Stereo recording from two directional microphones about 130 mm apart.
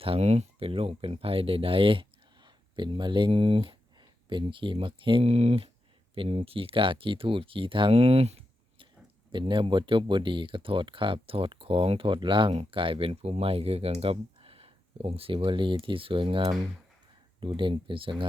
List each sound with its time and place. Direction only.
0.0 s speech: 50° right (ahead or behind)
9.3 s speech: 40° right (ahead or behind)